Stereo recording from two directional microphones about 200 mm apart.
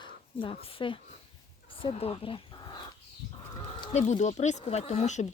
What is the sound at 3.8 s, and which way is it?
Speech, 30° left (ahead or behind).